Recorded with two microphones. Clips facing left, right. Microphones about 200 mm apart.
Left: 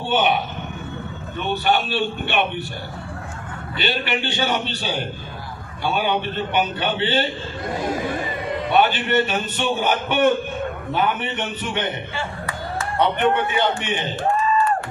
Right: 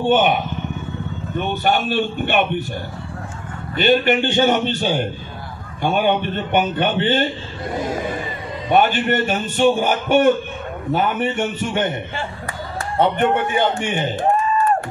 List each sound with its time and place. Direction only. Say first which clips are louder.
0.0 s a man's voice: right 4 dB; 50° right (ahead or behind)
1.5 s a man's voice: right 1 dB; 45° right (ahead or behind)
3.7 s a man's voice: right 9 dB; 50° right (ahead or behind)
8.6 s a man's voice: right 3 dB; 50° right (ahead or behind)
13.0 s a man's voice: right 2 dB; 50° right (ahead or behind)